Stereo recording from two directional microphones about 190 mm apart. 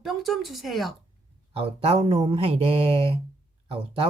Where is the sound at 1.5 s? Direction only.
30° right (ahead or behind).